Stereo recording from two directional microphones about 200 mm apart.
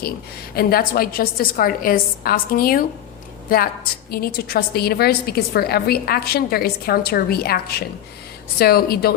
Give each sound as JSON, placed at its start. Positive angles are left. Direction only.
{"t": 0.5, "sound": "a woman's voice", "side_deg": 50}
{"t": 4.1, "sound": "a woman's voice", "side_deg": 50}